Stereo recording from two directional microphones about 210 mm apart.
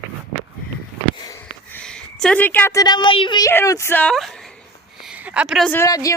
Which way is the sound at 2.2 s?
5° left (ahead or behind).